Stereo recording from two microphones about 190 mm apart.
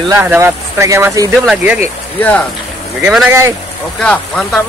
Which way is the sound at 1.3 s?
5° right (ahead or behind).